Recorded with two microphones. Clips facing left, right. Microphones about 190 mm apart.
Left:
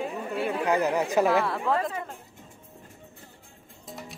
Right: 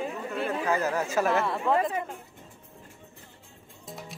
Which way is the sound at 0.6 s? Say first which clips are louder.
Left 4 dB; 15° left (ahead or behind).